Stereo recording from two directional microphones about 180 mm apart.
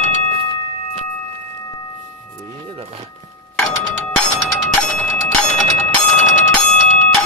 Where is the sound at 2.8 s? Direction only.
35° right (ahead or behind).